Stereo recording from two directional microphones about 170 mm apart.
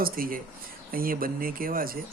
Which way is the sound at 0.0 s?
55° right (ahead or behind).